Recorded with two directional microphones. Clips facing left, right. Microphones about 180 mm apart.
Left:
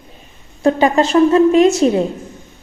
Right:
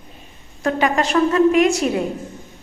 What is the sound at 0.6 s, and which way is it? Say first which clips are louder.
A woman's voice: left 6 dB; 30° left (ahead or behind).